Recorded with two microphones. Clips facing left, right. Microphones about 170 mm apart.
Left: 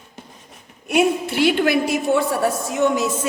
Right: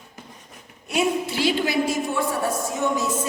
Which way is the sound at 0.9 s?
60° left (ahead or behind).